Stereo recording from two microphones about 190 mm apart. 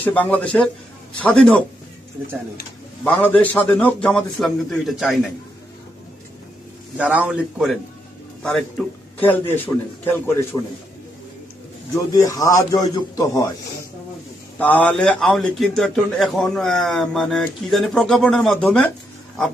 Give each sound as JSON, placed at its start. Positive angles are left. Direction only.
{"t": 0.0, "sound": "a man's voice", "side_deg": 10}
{"t": 3.0, "sound": "a man's voice", "side_deg": 10}
{"t": 6.9, "sound": "a man's voice", "side_deg": -5}
{"t": 9.1, "sound": "a man's voice", "side_deg": 10}
{"t": 12.1, "sound": "a man's voice", "side_deg": 20}
{"t": 14.6, "sound": "a man's voice", "side_deg": 10}